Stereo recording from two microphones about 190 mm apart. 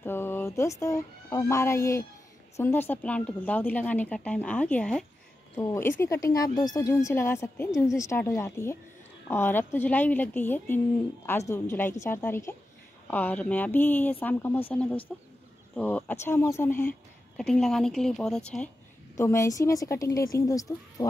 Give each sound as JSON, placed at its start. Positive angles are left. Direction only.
{"t": 0.0, "sound": "a woman's voice", "side_deg": 10}
{"t": 19.1, "sound": "speech", "side_deg": 15}